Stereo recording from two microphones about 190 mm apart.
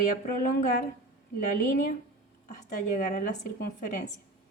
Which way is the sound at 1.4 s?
40° left (ahead or behind).